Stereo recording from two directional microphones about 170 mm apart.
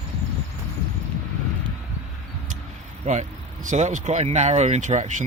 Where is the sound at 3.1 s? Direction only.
45° right (ahead or behind).